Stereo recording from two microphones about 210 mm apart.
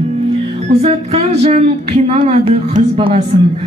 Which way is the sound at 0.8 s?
30° right (ahead or behind).